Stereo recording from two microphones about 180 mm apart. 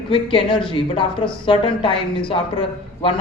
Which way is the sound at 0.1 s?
30° left (ahead or behind).